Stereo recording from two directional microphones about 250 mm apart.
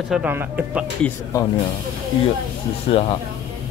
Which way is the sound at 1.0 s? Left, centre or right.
Centre.